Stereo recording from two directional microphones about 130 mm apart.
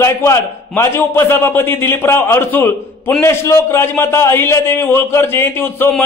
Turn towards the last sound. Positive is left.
turn(degrees=15)  # may be behind; listen again after turning